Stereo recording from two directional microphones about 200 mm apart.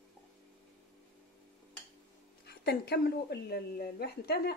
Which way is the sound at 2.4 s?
55° left (ahead or behind).